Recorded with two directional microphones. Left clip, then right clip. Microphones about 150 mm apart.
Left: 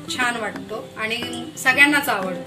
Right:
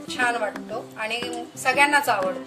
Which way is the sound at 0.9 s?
55° right (ahead or behind).